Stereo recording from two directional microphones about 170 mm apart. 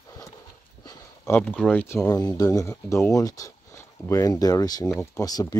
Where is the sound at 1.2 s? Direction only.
5° left (ahead or behind).